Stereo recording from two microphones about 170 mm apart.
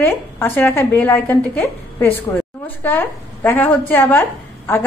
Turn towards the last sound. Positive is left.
turn(degrees=10)  # may be behind; listen again after turning